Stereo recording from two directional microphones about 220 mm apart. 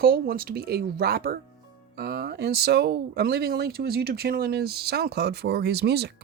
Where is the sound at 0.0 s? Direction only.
45° right (ahead or behind).